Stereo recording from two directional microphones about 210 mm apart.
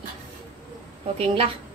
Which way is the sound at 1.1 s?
30° right (ahead or behind).